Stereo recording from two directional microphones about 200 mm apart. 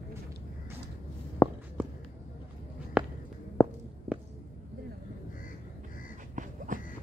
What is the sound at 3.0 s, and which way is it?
Walk, 5° right (ahead or behind).